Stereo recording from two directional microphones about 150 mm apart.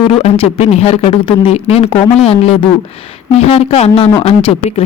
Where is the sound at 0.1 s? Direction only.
40° left (ahead or behind).